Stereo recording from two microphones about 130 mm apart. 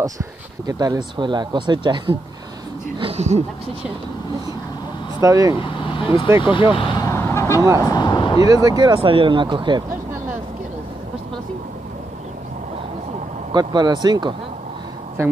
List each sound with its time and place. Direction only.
0.0 s speech: 30° right (ahead or behind)
3.0 s speech: 50° right (ahead or behind)
5.2 s speech: 25° right (ahead or behind)
5.6 s vehicle: 40° left (ahead or behind)
6.3 s speech: 20° right (ahead or behind)
6.7 s speech: 40° left (ahead or behind)
7.1 s vehicle: 20° left (ahead or behind)
7.8 s speech: 35° left (ahead or behind)
8.5 s speech: 30° right (ahead or behind)
13.5 s speech: 35° right (ahead or behind)